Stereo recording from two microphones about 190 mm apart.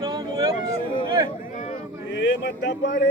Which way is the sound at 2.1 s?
65° left (ahead or behind).